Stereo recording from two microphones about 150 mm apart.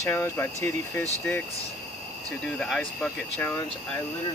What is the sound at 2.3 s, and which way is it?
Speech, 5° left (ahead or behind).